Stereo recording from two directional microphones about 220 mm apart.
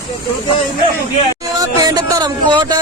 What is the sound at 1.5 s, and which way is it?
Speech, 15° right (ahead or behind).